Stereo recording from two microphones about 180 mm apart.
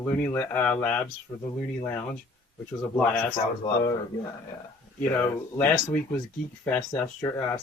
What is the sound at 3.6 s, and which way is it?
Speech, 25° left (ahead or behind).